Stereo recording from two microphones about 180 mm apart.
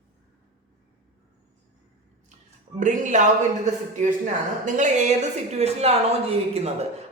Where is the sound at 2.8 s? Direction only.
45° right (ahead or behind).